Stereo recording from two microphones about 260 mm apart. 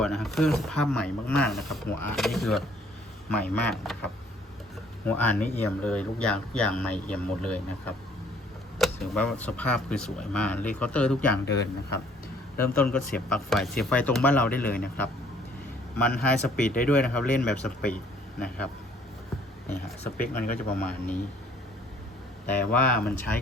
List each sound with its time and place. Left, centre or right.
0.0 s speech: centre
11.4 s speech: left
12.5 s speech: centre
20.2 s speech: centre
22.4 s speech: centre